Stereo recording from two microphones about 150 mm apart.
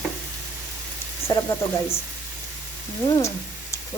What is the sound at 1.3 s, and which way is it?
Speech, 20° left (ahead or behind).